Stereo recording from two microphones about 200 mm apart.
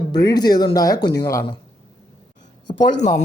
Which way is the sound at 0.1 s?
20° left (ahead or behind).